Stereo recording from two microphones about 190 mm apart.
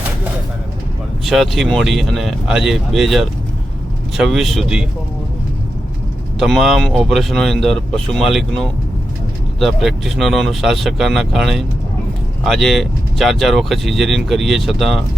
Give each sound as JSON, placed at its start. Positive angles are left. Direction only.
{"t": 1.2, "sound": "speech", "side_deg": 0}
{"t": 6.4, "sound": "speech", "side_deg": 0}